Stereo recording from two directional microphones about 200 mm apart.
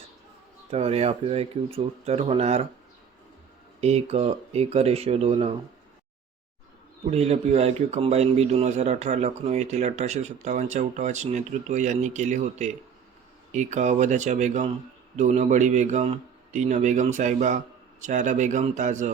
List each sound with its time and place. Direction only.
0.7 s speech: 30° right (ahead or behind)
3.8 s speech: 30° right (ahead or behind)
7.1 s speech: 30° right (ahead or behind)